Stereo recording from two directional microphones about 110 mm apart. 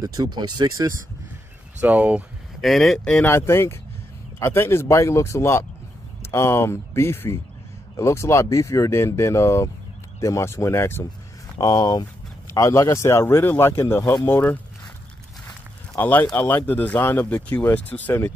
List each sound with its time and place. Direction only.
0.0 s speech: 35° right (ahead or behind)
1.8 s speech: 15° right (ahead or behind)
2.6 s speech: centre (ahead or behind)
3.1 s speech: 20° left (ahead or behind)
11.5 s speech: 35° left (ahead or behind)
16.0 s speech: 15° left (ahead or behind)